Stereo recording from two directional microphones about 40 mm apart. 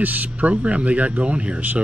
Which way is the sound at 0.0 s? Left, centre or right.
Right.